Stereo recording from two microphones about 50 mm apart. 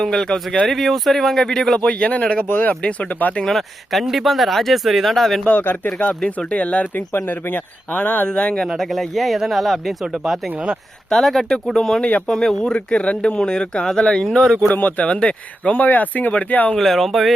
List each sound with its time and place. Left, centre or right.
0.0 s speech: centre
1.9 s speech: left
4.0 s speech: centre
5.5 s speech: left
6.0 s speech: left
6.9 s speech: left
8.3 s speech: centre
8.8 s speech: centre
11.9 s speech: left
12.3 s speech: centre
14.7 s speech: left
15.0 s speech: left
16.7 s speech: centre